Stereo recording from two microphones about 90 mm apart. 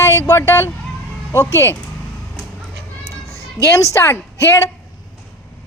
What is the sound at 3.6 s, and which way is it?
A woman's voice, 35° left (ahead or behind).